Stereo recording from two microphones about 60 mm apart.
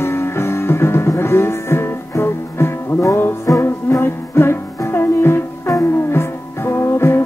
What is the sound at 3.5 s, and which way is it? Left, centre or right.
Music, left.